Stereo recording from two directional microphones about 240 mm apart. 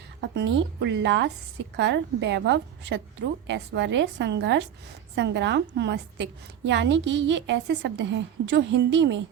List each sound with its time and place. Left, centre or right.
0.2 s a woman's voice: right